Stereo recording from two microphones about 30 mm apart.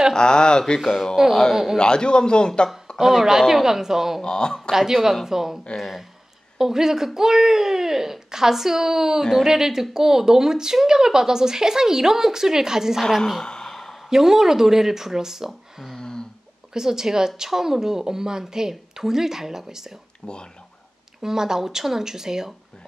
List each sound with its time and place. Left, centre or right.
0.1 s a man's voice: left
0.7 s speech: centre
1.8 s a man's voice: left
3.0 s a woman's voice: centre
4.2 s a man's voice: left
4.7 s a woman's voice: centre
6.6 s a woman's voice: centre
13.4 s sigh: left
14.0 s a woman's voice: centre
16.0 s a sound: left
16.7 s a woman's voice: centre
20.2 s a man's voice: left
21.2 s a woman's voice: centre